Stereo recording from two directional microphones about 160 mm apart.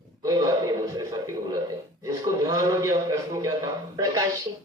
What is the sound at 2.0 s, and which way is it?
Speech, 20° right (ahead or behind).